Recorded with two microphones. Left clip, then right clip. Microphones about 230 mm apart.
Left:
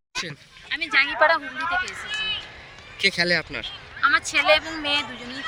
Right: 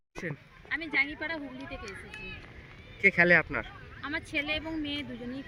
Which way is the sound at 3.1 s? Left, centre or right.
Centre.